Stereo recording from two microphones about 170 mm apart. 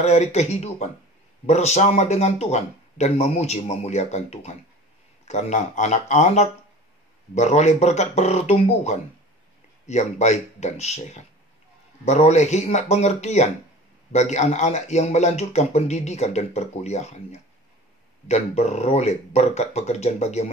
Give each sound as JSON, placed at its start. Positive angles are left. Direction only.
{"t": 0.0, "sound": "speech", "side_deg": 40}